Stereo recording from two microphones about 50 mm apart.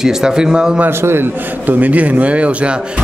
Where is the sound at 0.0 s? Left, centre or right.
Centre.